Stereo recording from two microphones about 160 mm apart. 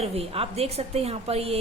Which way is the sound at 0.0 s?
40° right (ahead or behind).